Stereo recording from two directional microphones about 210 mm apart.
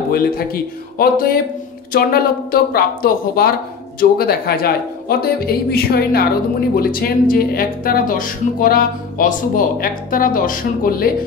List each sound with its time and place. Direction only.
0.9 s speech: 45° left (ahead or behind)